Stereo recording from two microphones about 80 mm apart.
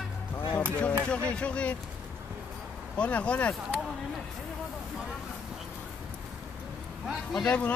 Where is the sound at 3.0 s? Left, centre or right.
Centre.